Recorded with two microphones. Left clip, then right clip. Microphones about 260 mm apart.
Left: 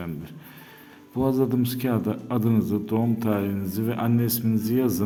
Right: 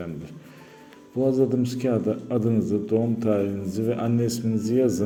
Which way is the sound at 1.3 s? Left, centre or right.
Centre.